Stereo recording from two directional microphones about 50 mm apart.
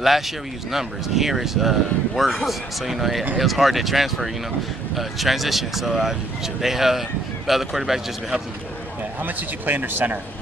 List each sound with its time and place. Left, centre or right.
0.7 s speech: centre
9.2 s a man's voice: right